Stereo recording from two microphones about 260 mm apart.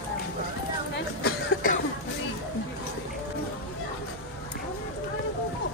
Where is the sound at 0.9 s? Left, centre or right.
Left.